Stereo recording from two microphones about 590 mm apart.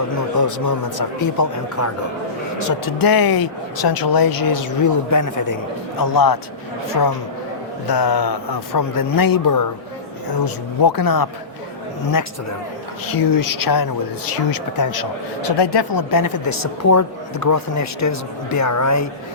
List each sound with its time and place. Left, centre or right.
0.3 s speech: left
13.1 s speech: left